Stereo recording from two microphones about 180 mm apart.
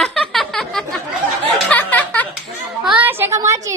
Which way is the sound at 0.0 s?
Centre (ahead or behind).